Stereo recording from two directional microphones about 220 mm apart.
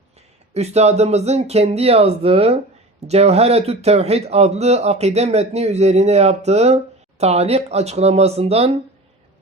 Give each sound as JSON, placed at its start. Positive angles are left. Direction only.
{"t": 0.5, "sound": "a man's voice", "side_deg": -30}